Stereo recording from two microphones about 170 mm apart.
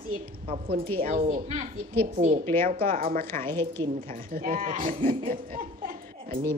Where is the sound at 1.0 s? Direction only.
55° right (ahead or behind).